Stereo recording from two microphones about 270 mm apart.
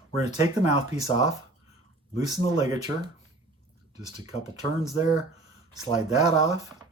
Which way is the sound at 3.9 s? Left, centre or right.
Centre.